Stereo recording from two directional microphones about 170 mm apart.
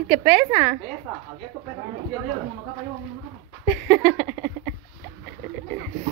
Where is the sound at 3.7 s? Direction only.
Centre (ahead or behind).